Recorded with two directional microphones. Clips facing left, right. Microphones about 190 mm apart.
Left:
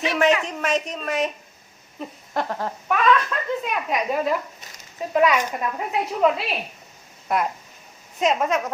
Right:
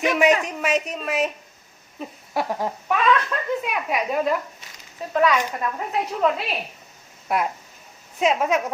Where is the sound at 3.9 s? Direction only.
Centre (ahead or behind).